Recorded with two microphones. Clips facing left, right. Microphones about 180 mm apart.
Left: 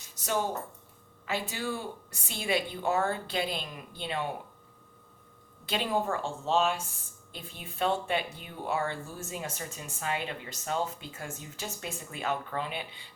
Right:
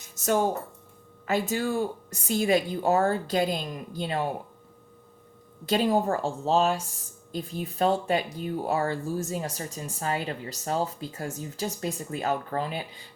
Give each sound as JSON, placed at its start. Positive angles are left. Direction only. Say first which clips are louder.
{"t": 0.2, "sound": "a woman's voice", "louder": "right 6 dB", "side_deg": -45}
{"t": 5.6, "sound": "speech", "louder": "right 6 dB", "side_deg": -40}